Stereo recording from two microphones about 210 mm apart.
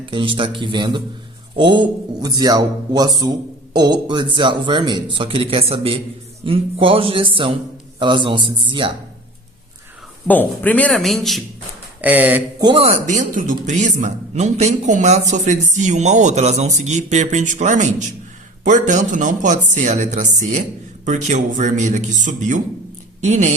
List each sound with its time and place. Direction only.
0.0 s speech: 25° right (ahead or behind)
10.2 s speech: 10° left (ahead or behind); by 12.6 s 10° right (ahead or behind)
12.6 s a man's voice: 25° right (ahead or behind)